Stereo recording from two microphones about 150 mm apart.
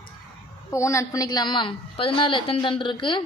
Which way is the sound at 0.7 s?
20° left (ahead or behind).